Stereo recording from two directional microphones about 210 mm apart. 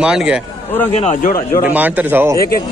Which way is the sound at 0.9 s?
35° left (ahead or behind).